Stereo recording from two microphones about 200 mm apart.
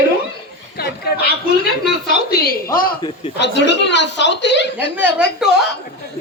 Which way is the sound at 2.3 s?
50° left (ahead or behind).